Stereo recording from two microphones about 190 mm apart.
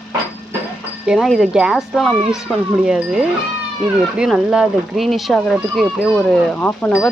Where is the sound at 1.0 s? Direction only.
Centre (ahead or behind).